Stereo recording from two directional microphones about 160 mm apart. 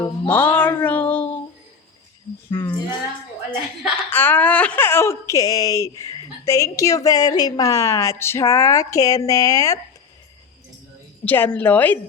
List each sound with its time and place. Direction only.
0.0 s music: 10° left (ahead or behind)
2.5 s speech: 20° left (ahead or behind)
4.1 s speech: 10° left (ahead or behind)
11.3 s a woman's voice: 10° left (ahead or behind)